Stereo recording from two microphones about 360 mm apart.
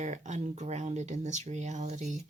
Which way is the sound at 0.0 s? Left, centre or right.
Centre.